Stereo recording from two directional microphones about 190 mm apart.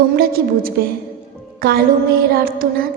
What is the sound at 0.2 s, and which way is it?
A woman's voice, 50° right (ahead or behind).